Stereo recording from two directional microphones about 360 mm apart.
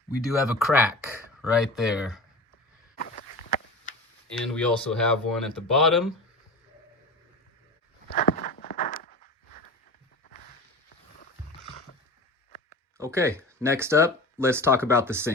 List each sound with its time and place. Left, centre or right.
0.3 s speech: centre
3.0 s walk: left
4.3 s speech: centre
8.1 s walk: left
13.0 s speech: centre